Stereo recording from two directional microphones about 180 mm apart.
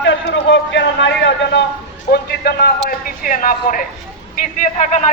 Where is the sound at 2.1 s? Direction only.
60° left (ahead or behind).